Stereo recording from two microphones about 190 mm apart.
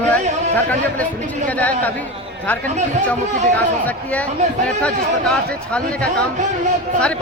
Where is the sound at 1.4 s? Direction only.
10° left (ahead or behind).